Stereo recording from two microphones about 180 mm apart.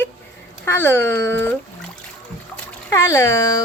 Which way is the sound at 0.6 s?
10° left (ahead or behind).